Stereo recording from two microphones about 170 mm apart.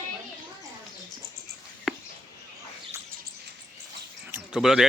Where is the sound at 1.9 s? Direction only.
Centre (ahead or behind).